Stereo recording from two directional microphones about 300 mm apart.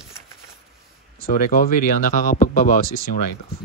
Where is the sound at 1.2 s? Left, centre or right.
Left.